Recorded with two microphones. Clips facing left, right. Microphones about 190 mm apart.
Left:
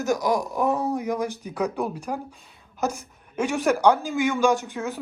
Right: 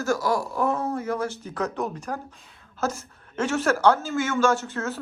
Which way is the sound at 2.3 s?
Centre (ahead or behind).